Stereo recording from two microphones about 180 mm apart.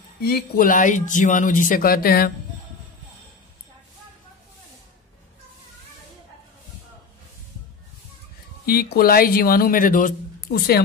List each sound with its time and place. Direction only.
0.2 s speech: 55° left (ahead or behind)
8.6 s speech: 55° left (ahead or behind)